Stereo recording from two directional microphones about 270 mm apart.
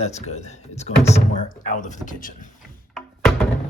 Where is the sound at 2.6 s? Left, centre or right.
Centre.